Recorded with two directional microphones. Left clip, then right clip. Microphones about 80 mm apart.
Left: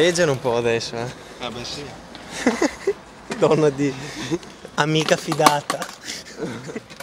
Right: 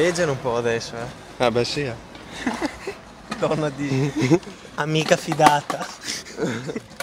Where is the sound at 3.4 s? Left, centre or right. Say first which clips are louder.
Left 6 dB; centre.